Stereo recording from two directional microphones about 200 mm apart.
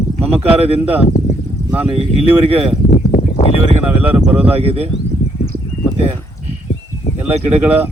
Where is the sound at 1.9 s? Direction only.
30° right (ahead or behind).